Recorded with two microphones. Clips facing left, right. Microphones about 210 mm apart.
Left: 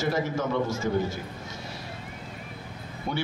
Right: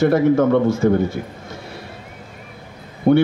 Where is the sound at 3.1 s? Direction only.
55° right (ahead or behind).